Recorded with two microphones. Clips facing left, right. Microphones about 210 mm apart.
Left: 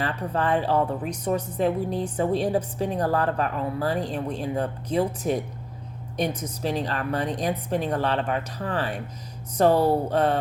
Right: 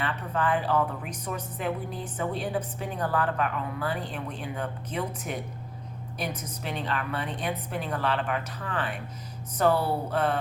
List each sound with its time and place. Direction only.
0.0 s a woman's voice: 35° left (ahead or behind)
6.6 s a woman's voice: 35° left (ahead or behind)